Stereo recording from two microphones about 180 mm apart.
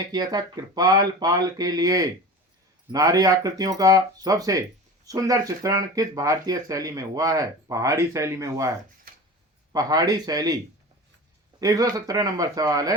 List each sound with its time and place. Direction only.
0.1 s speech: 20° right (ahead or behind)
9.7 s speech: 20° right (ahead or behind)
11.6 s speech: 20° right (ahead or behind)